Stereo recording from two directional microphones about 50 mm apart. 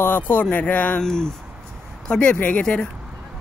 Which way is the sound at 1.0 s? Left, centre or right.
Centre.